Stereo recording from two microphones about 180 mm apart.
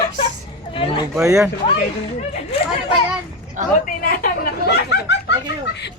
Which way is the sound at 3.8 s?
50° left (ahead or behind).